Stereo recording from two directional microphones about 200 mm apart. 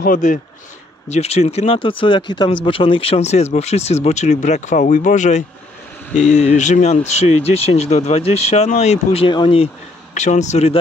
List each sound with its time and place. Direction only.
0.0 s speech: 40° left (ahead or behind)
1.0 s speech: 30° left (ahead or behind)
10.1 s speech: 35° left (ahead or behind)